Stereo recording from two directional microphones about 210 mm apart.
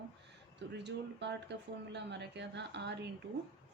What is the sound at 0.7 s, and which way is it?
Speech, 55° right (ahead or behind).